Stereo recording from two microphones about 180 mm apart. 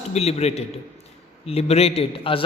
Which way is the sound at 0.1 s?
35° left (ahead or behind).